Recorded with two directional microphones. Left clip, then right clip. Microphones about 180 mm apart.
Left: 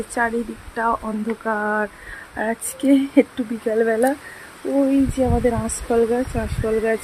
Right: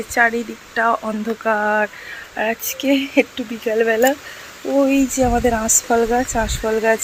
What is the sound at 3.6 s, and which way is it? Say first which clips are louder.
Speech: right 3 dB; 10° left (ahead or behind).